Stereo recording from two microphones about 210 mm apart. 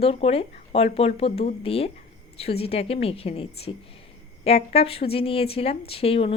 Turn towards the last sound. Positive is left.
turn(degrees=30)  # may be behind; listen again after turning